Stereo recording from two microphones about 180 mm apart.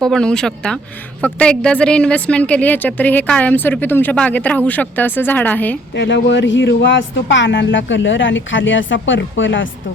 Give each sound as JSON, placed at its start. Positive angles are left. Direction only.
{"t": 0.0, "sound": "a woman's voice", "side_deg": 5}
{"t": 6.0, "sound": "speech", "side_deg": 75}